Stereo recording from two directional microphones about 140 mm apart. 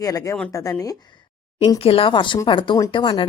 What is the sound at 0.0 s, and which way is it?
Speech, 25° left (ahead or behind).